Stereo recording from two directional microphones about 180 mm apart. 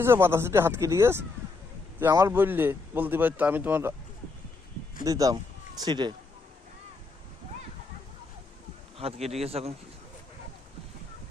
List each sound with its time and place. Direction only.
0.0 s a man's voice: 15° right (ahead or behind)
5.0 s speech: 20° right (ahead or behind)
9.0 s speech: 35° right (ahead or behind)